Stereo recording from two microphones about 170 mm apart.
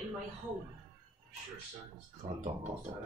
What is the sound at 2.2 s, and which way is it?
Speech, 45° right (ahead or behind).